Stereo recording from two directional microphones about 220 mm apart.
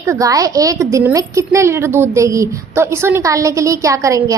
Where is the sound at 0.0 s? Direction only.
15° right (ahead or behind).